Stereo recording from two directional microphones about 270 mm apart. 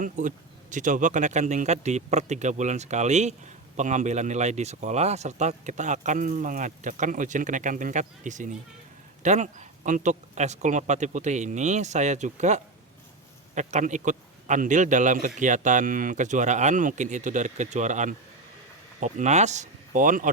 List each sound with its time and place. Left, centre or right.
0.0 s speech: right